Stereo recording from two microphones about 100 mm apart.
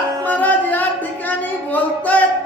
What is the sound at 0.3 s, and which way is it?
Music, 15° left (ahead or behind).